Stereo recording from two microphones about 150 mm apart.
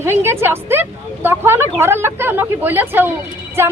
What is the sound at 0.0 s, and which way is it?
A woman's voice, 15° right (ahead or behind).